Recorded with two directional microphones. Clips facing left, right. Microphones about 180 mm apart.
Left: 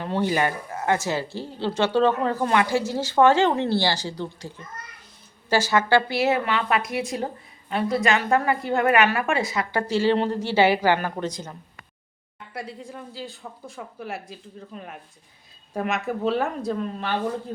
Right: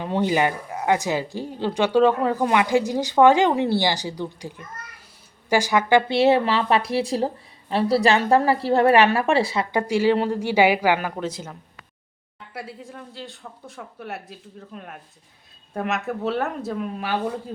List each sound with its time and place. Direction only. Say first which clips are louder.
0.0 s speech: right 2 dB; 15° right (ahead or behind)
6.1 s a woman's voice: right 5 dB; 30° right (ahead or behind)
9.7 s speech: right 2 dB; 10° right (ahead or behind)
12.5 s speech: left 1 dB; centre (ahead or behind)